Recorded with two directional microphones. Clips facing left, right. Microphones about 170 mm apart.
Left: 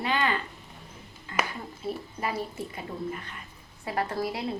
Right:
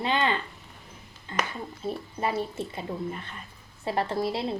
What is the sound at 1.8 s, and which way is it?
Speech, 25° right (ahead or behind).